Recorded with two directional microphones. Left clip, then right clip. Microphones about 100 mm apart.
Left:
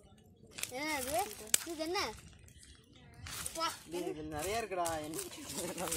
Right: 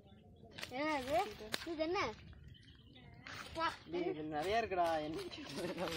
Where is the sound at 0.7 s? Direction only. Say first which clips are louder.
Even; 20° right (ahead or behind).